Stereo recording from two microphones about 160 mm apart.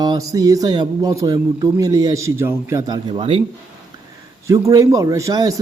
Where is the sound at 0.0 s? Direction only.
25° right (ahead or behind).